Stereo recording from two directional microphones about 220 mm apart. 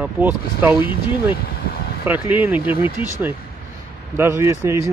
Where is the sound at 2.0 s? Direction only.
10° right (ahead or behind).